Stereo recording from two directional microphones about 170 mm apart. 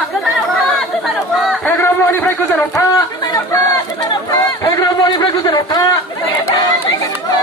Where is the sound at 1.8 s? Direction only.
15° left (ahead or behind).